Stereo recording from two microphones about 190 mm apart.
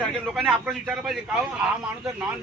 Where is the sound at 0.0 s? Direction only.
Centre (ahead or behind).